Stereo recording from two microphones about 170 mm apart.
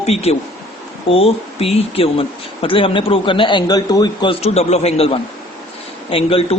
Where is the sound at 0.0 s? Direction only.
35° left (ahead or behind).